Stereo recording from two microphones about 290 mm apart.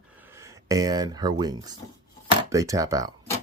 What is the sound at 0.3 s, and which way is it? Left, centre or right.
Speech, centre.